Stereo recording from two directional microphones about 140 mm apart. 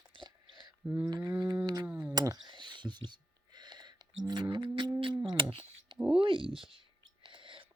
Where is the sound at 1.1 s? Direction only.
25° right (ahead or behind).